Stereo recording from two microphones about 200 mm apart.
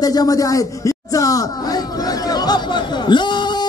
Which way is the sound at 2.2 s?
20° left (ahead or behind).